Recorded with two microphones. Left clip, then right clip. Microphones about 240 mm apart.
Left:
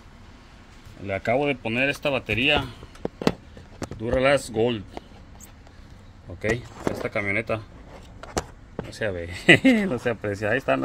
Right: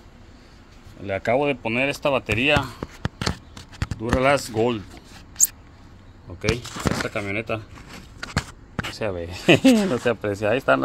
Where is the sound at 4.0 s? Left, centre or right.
Centre.